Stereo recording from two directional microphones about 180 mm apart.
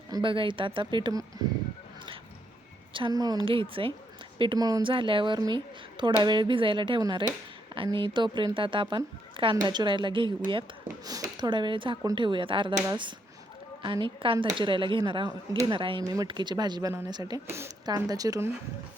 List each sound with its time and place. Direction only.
0.1 s a woman's voice: 30° right (ahead or behind)
2.9 s a woman's voice: 25° right (ahead or behind)